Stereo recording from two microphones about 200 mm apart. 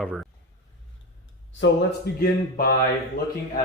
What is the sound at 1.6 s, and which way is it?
Speech, 65° left (ahead or behind).